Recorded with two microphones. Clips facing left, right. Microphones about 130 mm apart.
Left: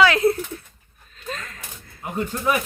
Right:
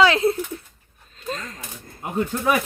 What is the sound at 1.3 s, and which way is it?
Speech, 35° right (ahead or behind).